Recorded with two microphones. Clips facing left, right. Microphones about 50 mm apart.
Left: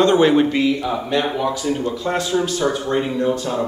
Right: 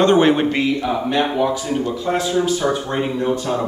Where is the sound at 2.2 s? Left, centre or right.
Centre.